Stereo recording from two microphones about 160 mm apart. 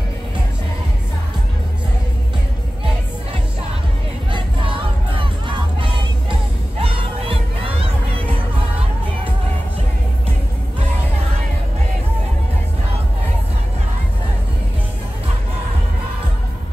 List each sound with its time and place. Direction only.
5.1 s music: 35° right (ahead or behind)
6.8 s crowd: 35° right (ahead or behind)